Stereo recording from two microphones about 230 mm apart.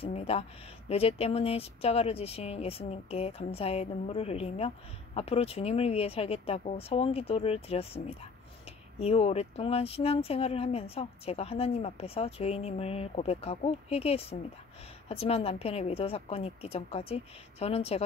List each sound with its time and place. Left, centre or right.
0.0 s speech: left